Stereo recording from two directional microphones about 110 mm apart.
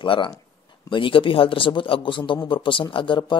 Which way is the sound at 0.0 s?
50° left (ahead or behind).